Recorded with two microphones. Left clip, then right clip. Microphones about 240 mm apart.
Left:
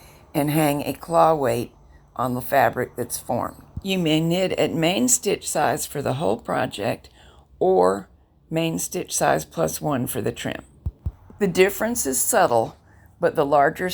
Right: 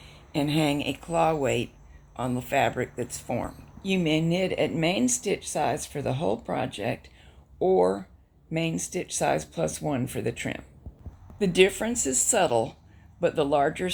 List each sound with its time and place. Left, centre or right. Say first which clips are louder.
0.5 s speech: left 4 dB; centre
3.8 s speech: left 4 dB; left
11.3 s a woman's voice: left 3 dB; left
11.6 s speech: left 2 dB; centre